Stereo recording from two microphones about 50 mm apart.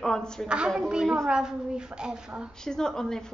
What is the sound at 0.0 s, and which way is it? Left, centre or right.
Speech, centre.